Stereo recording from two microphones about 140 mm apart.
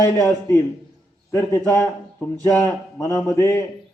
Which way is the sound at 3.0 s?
20° left (ahead or behind).